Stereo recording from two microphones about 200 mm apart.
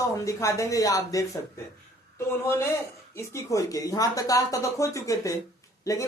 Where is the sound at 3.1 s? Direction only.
15° left (ahead or behind).